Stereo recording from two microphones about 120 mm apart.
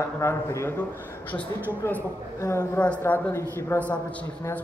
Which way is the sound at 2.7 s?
10° left (ahead or behind).